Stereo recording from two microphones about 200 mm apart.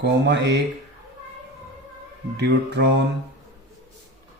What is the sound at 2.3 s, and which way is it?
Mantra, 60° right (ahead or behind).